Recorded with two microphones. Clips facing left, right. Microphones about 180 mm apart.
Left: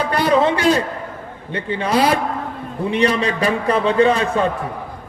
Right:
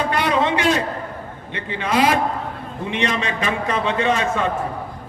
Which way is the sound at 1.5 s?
35° left (ahead or behind).